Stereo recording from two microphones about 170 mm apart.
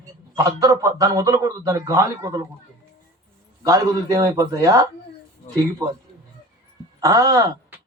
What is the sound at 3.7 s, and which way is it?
A man's voice, 20° right (ahead or behind).